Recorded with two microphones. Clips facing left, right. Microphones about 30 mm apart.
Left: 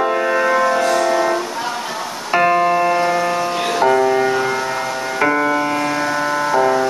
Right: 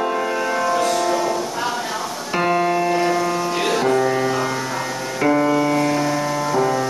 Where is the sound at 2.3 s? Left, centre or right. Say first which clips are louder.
Left 4 dB; centre.